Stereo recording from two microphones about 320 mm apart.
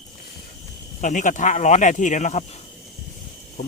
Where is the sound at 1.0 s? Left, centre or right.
Left.